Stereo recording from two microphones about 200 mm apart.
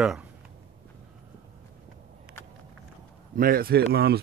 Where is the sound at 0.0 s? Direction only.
5° right (ahead or behind).